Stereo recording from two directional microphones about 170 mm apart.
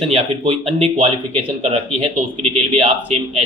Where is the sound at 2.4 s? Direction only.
35° right (ahead or behind).